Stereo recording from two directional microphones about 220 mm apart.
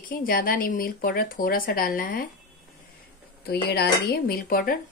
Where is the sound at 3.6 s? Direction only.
45° left (ahead or behind).